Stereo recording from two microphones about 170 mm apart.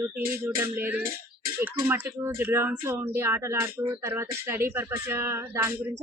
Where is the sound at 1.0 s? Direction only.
60° right (ahead or behind).